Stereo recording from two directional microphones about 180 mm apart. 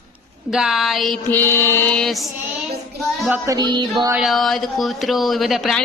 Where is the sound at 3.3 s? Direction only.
20° right (ahead or behind).